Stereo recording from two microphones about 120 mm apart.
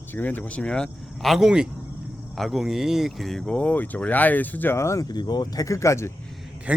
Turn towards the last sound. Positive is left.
turn(degrees=-10)  # may be behind; listen again after turning